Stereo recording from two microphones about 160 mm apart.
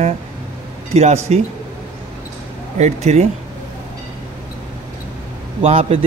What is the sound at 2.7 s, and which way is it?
Speech, 45° right (ahead or behind).